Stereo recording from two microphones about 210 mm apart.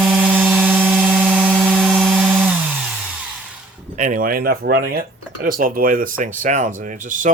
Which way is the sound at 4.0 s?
40° right (ahead or behind).